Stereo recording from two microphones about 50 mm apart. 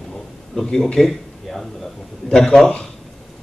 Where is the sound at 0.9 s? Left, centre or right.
Centre.